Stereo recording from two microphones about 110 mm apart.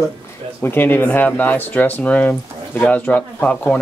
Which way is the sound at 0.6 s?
20° left (ahead or behind).